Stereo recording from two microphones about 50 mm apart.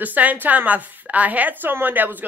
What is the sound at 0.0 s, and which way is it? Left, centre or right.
A woman's voice, right.